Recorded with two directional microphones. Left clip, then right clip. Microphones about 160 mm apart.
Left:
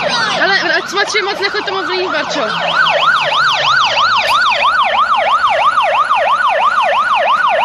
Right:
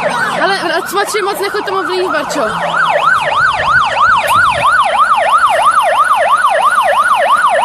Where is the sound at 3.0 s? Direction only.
15° right (ahead or behind).